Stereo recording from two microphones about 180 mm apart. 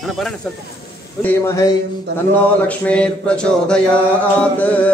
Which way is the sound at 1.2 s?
15° left (ahead or behind).